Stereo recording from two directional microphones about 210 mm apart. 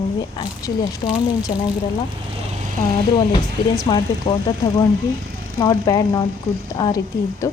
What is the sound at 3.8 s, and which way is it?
Speech, 20° left (ahead or behind).